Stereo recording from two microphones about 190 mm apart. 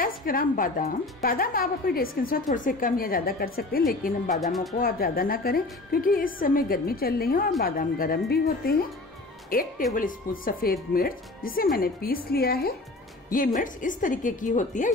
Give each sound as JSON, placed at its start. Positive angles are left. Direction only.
{"t": 0.0, "sound": "a woman's voice", "side_deg": 50}